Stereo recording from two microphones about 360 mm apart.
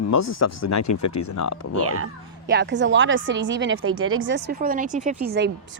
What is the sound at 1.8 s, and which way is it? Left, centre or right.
A woman's voice, right.